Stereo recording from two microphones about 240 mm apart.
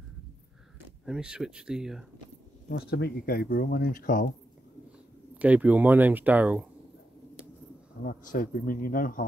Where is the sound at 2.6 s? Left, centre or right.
Left.